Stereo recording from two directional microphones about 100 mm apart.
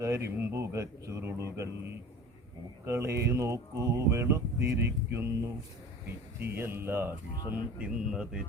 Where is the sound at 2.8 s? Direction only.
25° right (ahead or behind).